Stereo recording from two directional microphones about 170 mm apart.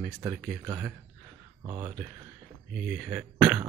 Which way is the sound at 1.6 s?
30° right (ahead or behind).